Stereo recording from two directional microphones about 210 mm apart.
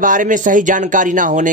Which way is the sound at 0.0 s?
40° right (ahead or behind).